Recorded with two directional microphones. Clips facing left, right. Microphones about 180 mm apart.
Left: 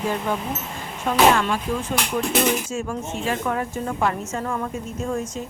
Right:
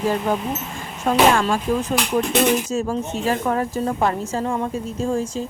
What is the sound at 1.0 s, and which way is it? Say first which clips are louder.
A woman's voice: right 2 dB; 45° right (ahead or behind).